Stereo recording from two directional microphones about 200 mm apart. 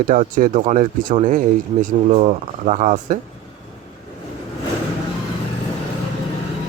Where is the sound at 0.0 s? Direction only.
40° right (ahead or behind).